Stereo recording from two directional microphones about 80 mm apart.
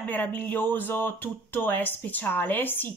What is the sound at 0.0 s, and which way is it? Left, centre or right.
Speech, left.